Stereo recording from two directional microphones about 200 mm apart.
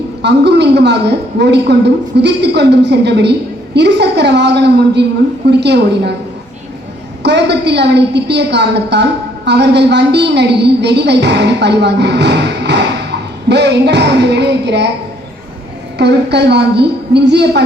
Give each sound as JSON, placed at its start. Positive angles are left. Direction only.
{"t": 0.2, "sound": "a woman's voice", "side_deg": -55}
{"t": 7.2, "sound": "a woman's voice", "side_deg": -60}
{"t": 16.0, "sound": "a woman's voice", "side_deg": -55}